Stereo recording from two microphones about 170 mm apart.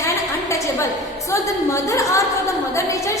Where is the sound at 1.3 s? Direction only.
20° left (ahead or behind).